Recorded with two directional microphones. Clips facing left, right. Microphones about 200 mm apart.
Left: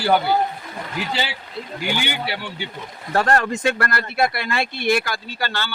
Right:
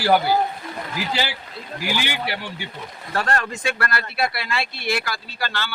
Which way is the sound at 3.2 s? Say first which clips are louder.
Left 5 dB; 40° left (ahead or behind).